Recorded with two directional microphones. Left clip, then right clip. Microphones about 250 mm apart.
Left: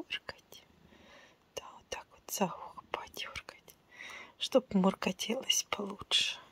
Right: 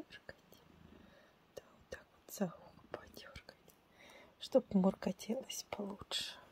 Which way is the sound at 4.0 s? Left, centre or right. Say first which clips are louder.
Left 13 dB; centre.